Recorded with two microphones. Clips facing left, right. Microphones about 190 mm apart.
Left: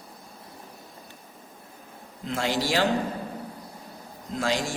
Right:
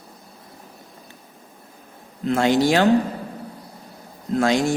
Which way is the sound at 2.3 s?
65° right (ahead or behind).